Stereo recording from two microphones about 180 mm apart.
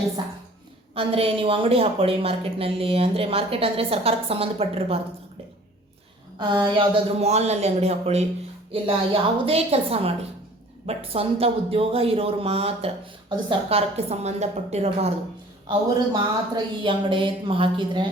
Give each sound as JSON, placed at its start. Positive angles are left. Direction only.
{"t": 0.9, "sound": "a woman's voice", "side_deg": -30}
{"t": 6.4, "sound": "a woman's voice", "side_deg": -25}
{"t": 16.1, "sound": "speech", "side_deg": -25}